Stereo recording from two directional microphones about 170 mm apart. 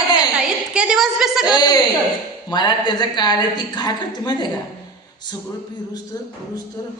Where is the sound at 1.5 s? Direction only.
25° left (ahead or behind).